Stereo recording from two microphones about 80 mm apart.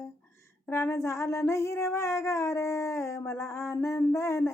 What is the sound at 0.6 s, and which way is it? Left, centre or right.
Child singing, left.